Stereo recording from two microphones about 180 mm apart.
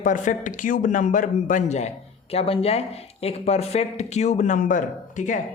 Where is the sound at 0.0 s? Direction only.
45° left (ahead or behind).